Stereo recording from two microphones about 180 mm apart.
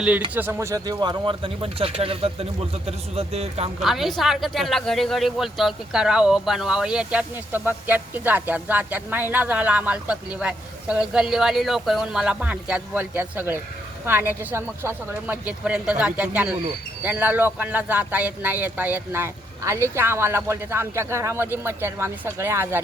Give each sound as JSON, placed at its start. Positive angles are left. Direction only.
{"t": 0.3, "sound": "speech", "side_deg": -15}
{"t": 3.8, "sound": "a man's voice", "side_deg": 0}